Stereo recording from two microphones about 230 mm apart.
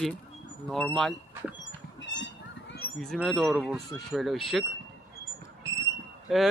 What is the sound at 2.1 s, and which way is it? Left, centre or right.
Children playing, left.